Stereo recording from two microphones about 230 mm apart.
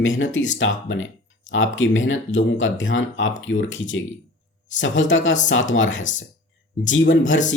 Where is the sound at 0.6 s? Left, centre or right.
Left.